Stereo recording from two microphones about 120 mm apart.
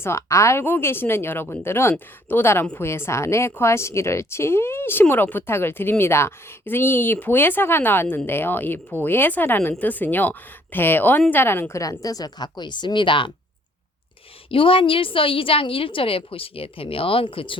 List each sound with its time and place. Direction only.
0.0 s a woman's voice: 25° left (ahead or behind); by 13.3 s 40° left (ahead or behind)
14.5 s a woman's voice: 50° left (ahead or behind)